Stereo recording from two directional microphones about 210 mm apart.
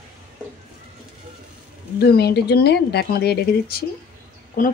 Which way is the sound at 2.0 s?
50° left (ahead or behind).